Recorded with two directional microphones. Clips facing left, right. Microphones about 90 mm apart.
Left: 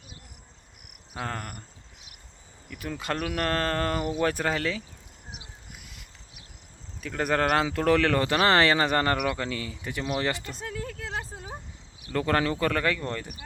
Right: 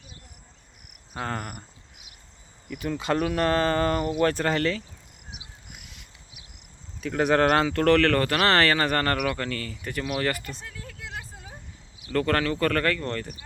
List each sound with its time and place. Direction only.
1.1 s speech: centre (ahead or behind)
2.6 s speech: centre (ahead or behind)
5.3 s a sound: centre (ahead or behind)
7.0 s speech: centre (ahead or behind); by 10.5 s 20° left (ahead or behind)
12.1 s speech: 15° left (ahead or behind)